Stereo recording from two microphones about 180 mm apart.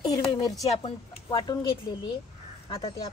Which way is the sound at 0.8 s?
30° left (ahead or behind).